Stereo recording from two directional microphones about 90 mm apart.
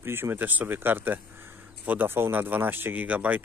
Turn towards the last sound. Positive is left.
turn(degrees=-15)  # may be behind; listen again after turning